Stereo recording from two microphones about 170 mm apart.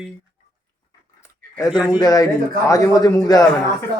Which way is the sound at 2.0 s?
25° left (ahead or behind).